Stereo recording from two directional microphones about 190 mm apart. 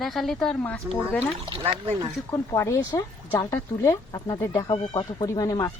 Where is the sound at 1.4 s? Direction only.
25° right (ahead or behind).